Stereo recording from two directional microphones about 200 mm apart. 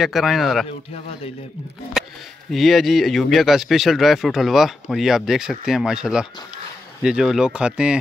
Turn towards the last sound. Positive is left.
turn(degrees=-5)  # may be behind; listen again after turning